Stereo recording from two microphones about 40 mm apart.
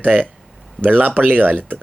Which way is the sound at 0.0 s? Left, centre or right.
Right.